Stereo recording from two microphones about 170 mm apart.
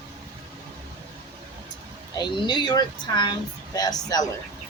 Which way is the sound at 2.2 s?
25° left (ahead or behind).